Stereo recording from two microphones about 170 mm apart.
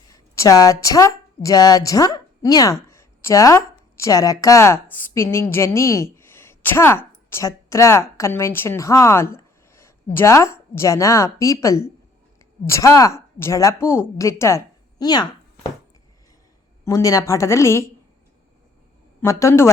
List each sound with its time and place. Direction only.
0.1 s a woman's voice: 20° left (ahead or behind)
16.8 s a woman's voice: 20° left (ahead or behind)
19.2 s a woman's voice: 15° left (ahead or behind)